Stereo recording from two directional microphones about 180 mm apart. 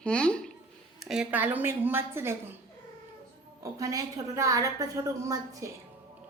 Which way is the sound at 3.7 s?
20° right (ahead or behind).